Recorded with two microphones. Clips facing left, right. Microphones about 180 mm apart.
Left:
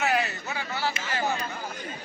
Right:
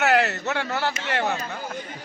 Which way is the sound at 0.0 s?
75° right (ahead or behind).